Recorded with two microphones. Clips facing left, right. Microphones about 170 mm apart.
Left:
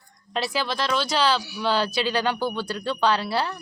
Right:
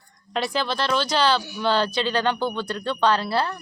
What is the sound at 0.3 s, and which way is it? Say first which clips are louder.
Speech: right 1 dB; 5° left (ahead or behind).